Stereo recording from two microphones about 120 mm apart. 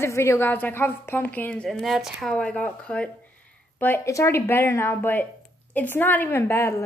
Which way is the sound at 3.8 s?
20° left (ahead or behind).